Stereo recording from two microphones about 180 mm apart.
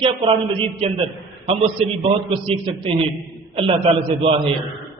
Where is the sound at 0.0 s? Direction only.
30° right (ahead or behind).